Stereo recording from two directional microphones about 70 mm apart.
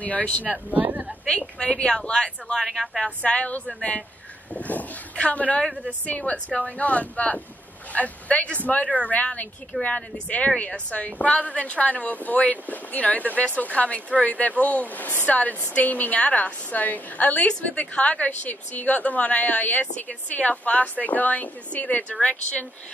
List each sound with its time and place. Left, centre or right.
0.0 s a woman's voice: left
0.7 s speech: right
1.6 s speech: centre
2.6 s a woman's voice: centre
3.2 s a woman's voice: centre